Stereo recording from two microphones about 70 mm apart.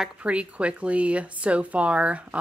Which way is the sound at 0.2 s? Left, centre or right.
Centre.